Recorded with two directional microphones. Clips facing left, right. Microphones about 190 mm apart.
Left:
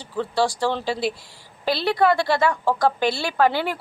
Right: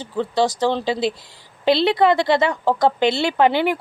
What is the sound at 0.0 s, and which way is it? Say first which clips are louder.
A woman's voice: right 3 dB; 20° right (ahead or behind).